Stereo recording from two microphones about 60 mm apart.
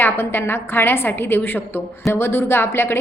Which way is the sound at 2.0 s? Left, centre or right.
Left.